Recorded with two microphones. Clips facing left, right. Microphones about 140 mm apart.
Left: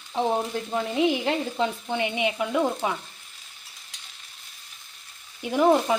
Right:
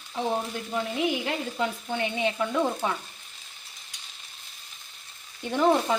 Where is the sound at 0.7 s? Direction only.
30° left (ahead or behind); by 2.9 s 10° left (ahead or behind).